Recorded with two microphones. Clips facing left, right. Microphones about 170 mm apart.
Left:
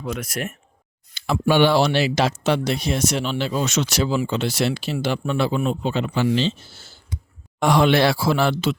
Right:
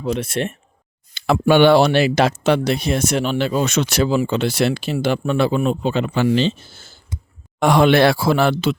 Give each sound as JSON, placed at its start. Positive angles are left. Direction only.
{"t": 0.0, "sound": "speech", "side_deg": -30}
{"t": 1.1, "sound": "speech", "side_deg": -60}